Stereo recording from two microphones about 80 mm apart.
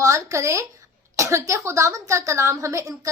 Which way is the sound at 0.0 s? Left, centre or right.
Right.